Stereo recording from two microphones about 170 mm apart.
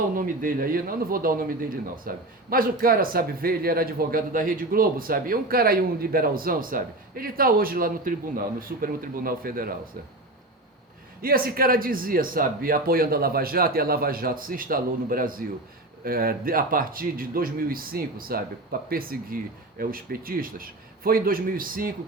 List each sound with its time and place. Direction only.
0.2 s speech: 60° right (ahead or behind)
11.2 s speech: 60° right (ahead or behind)